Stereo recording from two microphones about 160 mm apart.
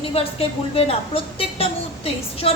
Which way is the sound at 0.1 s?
35° left (ahead or behind).